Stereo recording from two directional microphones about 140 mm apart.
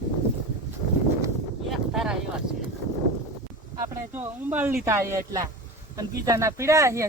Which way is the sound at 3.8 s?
20° right (ahead or behind).